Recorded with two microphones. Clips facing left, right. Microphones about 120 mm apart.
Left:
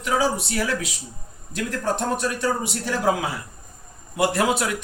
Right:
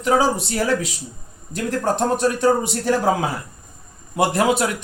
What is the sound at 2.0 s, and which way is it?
Speech, 40° right (ahead or behind).